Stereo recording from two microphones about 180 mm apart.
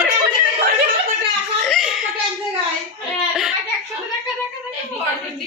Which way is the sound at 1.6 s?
Centre (ahead or behind).